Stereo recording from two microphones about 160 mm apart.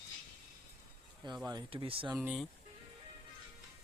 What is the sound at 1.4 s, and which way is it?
Speech, 30° right (ahead or behind).